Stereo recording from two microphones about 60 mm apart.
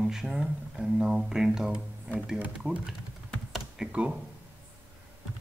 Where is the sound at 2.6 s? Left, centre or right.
Centre.